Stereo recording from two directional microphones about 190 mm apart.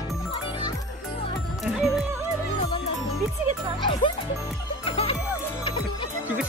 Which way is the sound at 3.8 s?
25° left (ahead or behind).